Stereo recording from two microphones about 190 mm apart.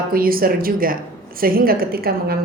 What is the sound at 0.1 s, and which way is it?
A woman's voice, 50° right (ahead or behind).